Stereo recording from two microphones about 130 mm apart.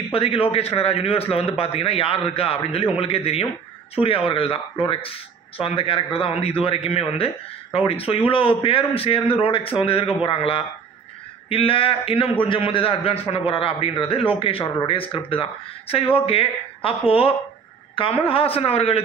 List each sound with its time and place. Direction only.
0.1 s speech: 45° left (ahead or behind)
17.9 s speech: 45° left (ahead or behind)